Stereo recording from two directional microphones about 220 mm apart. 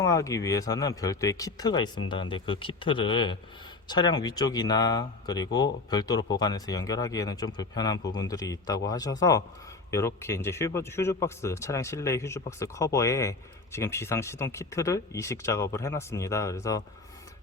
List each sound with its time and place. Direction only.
0.0 s a man's voice: 15° left (ahead or behind)